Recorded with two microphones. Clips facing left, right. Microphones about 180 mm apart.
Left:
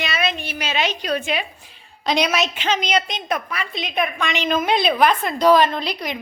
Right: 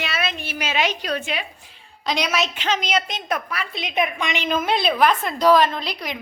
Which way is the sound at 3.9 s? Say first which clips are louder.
Even; 15° right (ahead or behind).